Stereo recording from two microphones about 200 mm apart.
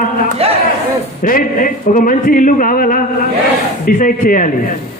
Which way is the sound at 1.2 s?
45° left (ahead or behind).